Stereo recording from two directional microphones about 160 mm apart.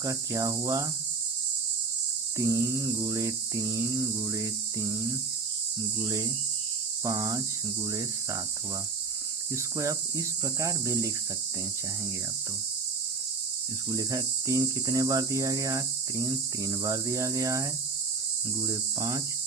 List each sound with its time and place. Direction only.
0.0 s cricket: 20° right (ahead or behind)
2.4 s cricket: 20° right (ahead or behind)
6.0 s cricket: 25° right (ahead or behind)
9.7 s cricket: 20° right (ahead or behind)
13.9 s cricket: 20° right (ahead or behind)